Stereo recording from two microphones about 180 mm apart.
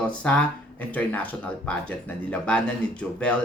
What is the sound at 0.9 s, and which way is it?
Speech, 10° left (ahead or behind).